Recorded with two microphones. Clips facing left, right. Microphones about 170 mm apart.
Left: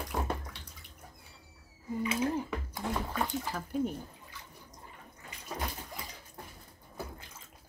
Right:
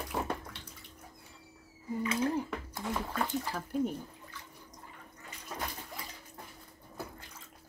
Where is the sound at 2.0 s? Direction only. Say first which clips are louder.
Even; 10° left (ahead or behind).